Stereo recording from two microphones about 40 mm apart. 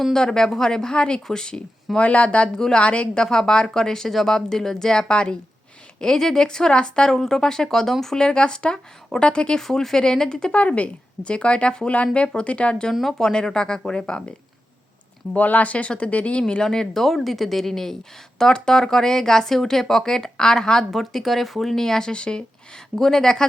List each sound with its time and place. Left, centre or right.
0.1 s speech: centre
2.0 s speech: left
2.6 s speech: centre
2.8 s speech: left
7.2 s speech: centre
9.6 s speech: centre
10.5 s speech: left
12.9 s speech: centre
13.1 s speech: centre
15.4 s speech: left
16.6 s speech: centre
20.9 s speech: centre; by 22.4 s left
23.0 s speech: centre